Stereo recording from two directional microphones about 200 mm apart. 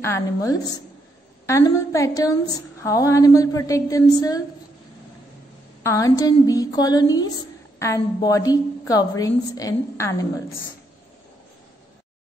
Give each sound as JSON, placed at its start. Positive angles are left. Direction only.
{"t": 0.0, "sound": "a woman's voice", "side_deg": 15}
{"t": 5.9, "sound": "a woman's voice", "side_deg": 15}